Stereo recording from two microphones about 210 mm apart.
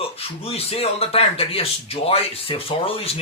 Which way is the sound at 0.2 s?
30° left (ahead or behind).